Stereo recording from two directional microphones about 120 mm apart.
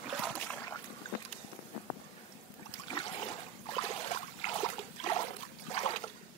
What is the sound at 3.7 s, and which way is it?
Trickle, 50° left (ahead or behind).